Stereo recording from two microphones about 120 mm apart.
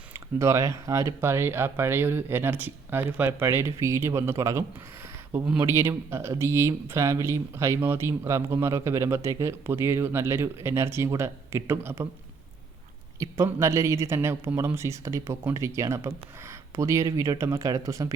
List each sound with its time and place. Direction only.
0.1 s speech: 25° right (ahead or behind)
13.1 s speech: 25° right (ahead or behind)